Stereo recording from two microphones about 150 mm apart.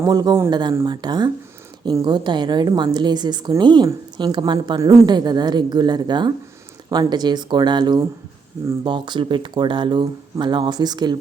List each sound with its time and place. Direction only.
0.0 s a woman's voice: 25° right (ahead or behind)